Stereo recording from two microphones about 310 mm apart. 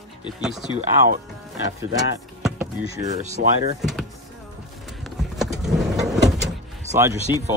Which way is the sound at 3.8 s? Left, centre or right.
Centre.